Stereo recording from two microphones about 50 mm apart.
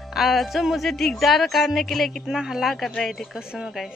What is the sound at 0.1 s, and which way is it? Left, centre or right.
Speech, centre.